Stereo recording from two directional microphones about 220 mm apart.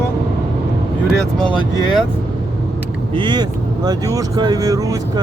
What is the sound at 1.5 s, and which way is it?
Speech, 20° left (ahead or behind).